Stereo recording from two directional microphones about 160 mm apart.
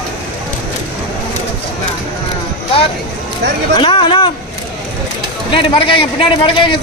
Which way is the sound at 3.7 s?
30° left (ahead or behind).